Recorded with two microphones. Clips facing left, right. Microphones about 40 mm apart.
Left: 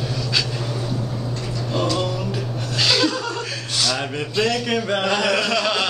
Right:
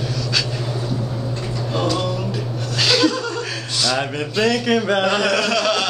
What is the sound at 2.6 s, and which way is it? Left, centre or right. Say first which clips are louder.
Chuckle: right 2 dB; centre.